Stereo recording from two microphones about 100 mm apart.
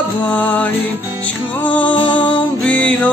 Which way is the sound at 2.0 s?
55° left (ahead or behind).